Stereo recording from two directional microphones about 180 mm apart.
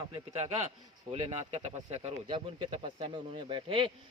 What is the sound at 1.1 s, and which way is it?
Speech, 35° right (ahead or behind).